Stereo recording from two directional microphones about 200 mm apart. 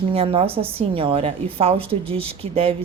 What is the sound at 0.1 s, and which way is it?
A woman's voice, 25° right (ahead or behind).